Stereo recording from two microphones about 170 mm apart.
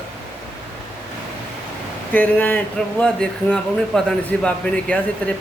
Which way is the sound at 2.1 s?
10° left (ahead or behind).